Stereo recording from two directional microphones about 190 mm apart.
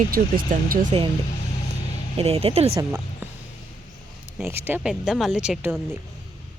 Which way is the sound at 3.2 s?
10° right (ahead or behind).